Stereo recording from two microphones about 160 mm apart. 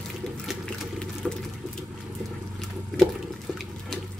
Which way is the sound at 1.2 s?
Centre (ahead or behind).